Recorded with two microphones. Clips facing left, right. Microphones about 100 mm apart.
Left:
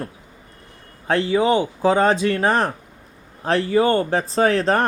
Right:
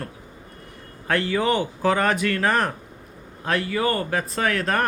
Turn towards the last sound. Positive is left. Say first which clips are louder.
# left 6 dB
turn(degrees=30)  # may be behind; listen again after turning